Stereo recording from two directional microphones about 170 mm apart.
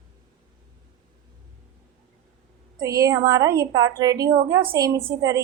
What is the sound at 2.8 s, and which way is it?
A woman's voice, 20° right (ahead or behind).